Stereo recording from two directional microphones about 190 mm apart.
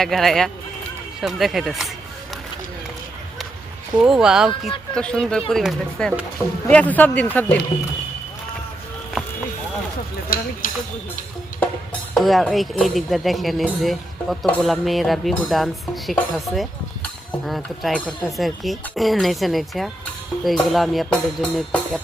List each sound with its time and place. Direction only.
0.0 s speech: centre (ahead or behind)
3.9 s speech: 5° right (ahead or behind)
10.2 s speech: 50° left (ahead or behind)
12.1 s speech: centre (ahead or behind)